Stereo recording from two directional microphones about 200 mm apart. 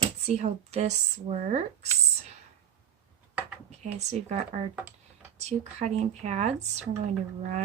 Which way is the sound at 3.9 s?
35° right (ahead or behind).